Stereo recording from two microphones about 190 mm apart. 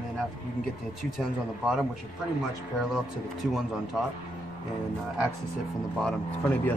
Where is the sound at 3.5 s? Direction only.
Centre (ahead or behind).